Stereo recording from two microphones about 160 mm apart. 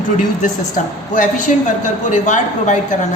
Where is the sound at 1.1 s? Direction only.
55° left (ahead or behind).